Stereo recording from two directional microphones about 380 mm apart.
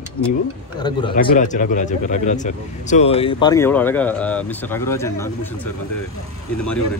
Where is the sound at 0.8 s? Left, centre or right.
Centre.